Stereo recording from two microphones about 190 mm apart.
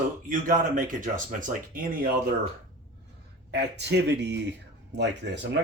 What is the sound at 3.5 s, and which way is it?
Speech, 65° right (ahead or behind).